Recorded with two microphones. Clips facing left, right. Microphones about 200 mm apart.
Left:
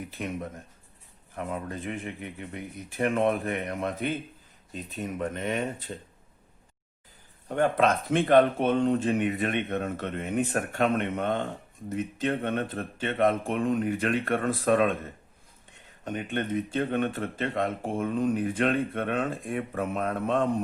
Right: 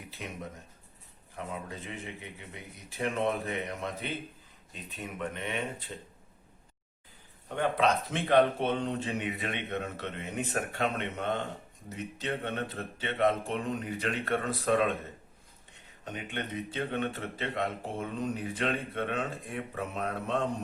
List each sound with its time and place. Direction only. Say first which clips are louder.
0.2 s speech: left 8 dB; 50° left (ahead or behind)
1.4 s speech: left 6 dB; 50° left (ahead or behind)
3.0 s speech: left 5 dB; 50° left (ahead or behind)
7.4 s speech: left 4 dB; 50° left (ahead or behind)
16.0 s speech: left 7 dB; 50° left (ahead or behind)